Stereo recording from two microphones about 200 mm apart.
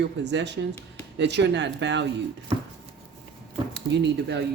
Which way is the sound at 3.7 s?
60° right (ahead or behind).